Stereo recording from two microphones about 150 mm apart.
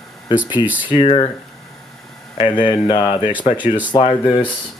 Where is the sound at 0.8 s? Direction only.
40° left (ahead or behind).